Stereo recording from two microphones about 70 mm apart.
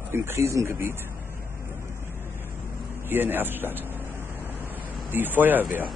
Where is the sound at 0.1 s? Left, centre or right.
Right.